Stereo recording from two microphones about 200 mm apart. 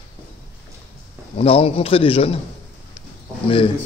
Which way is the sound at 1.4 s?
30° left (ahead or behind).